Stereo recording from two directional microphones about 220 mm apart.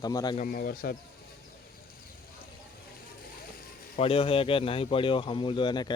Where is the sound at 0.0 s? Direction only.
15° left (ahead or behind).